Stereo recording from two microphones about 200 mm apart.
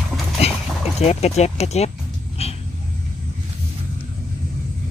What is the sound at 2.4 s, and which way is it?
Vehicle, 30° left (ahead or behind).